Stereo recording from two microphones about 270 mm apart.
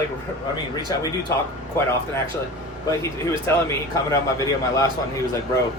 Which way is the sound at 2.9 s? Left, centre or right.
Centre.